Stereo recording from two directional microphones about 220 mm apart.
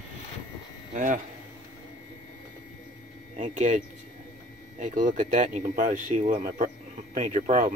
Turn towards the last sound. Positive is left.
turn(degrees=-35)  # may be behind; listen again after turning